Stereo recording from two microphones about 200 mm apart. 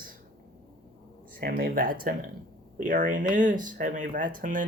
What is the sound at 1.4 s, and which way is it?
Speech, 50° right (ahead or behind).